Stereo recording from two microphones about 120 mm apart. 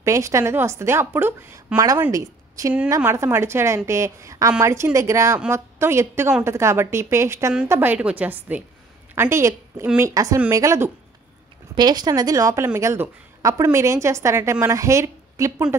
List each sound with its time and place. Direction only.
0.0 s a woman's voice: 25° right (ahead or behind)
11.7 s speech: 35° right (ahead or behind)